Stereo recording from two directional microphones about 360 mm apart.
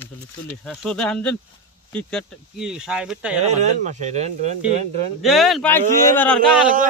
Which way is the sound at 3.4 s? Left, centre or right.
Centre.